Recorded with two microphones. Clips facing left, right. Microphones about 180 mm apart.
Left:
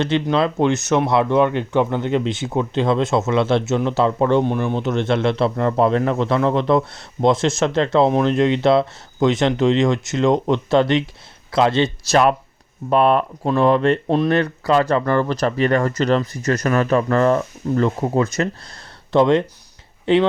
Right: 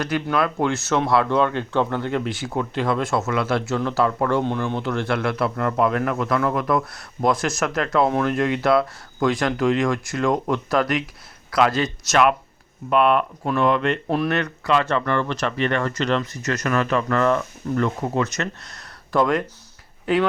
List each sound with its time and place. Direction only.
0.0 s speech: 25° left (ahead or behind)